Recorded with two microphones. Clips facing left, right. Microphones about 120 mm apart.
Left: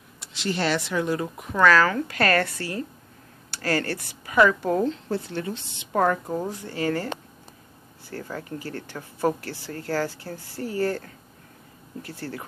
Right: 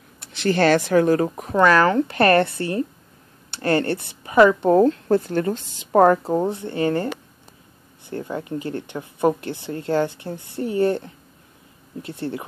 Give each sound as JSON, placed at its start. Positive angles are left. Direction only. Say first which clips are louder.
{"t": 0.3, "sound": "speech", "louder": "right 8 dB", "side_deg": -50}
{"t": 1.6, "sound": "speech", "louder": "right 3 dB", "side_deg": -25}
{"t": 4.7, "sound": "a woman's voice", "louder": "right 9 dB", "side_deg": -50}
{"t": 8.1, "sound": "speech", "louder": "right 6 dB", "side_deg": -25}